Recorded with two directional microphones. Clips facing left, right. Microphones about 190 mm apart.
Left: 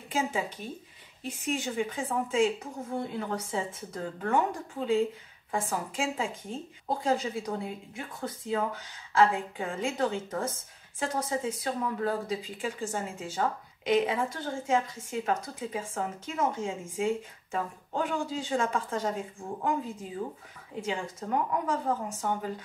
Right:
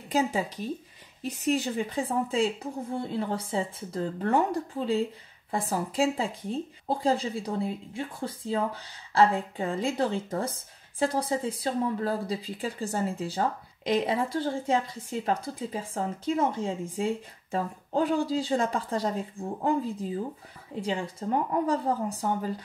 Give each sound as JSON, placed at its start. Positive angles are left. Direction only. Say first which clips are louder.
{"t": 0.1, "sound": "speech", "louder": "right 4 dB", "side_deg": -40}